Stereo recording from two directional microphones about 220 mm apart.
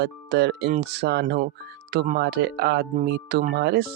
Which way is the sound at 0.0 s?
50° right (ahead or behind).